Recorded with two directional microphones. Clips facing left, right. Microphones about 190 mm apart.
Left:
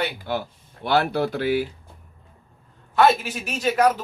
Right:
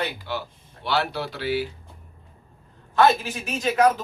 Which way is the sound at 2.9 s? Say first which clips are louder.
Left 1 dB; 10° left (ahead or behind).